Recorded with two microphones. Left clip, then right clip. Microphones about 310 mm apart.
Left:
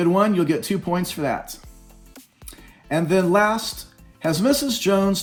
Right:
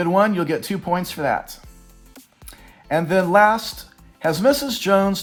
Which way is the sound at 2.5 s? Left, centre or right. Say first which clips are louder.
Right 3 dB; right.